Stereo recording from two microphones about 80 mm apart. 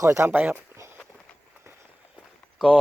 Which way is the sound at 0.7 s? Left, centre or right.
Right.